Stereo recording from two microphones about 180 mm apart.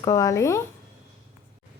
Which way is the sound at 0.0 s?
20° left (ahead or behind).